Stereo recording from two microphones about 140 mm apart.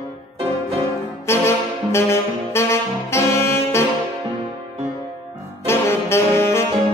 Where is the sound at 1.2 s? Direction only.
20° left (ahead or behind).